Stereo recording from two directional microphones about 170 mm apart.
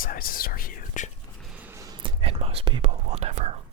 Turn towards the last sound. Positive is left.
turn(degrees=-40)  # may be behind; listen again after turning